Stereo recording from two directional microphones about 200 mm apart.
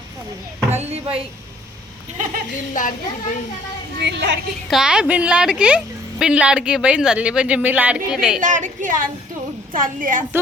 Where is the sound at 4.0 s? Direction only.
60° right (ahead or behind).